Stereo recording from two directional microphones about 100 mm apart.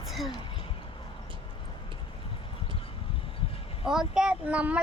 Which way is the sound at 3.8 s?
5° right (ahead or behind).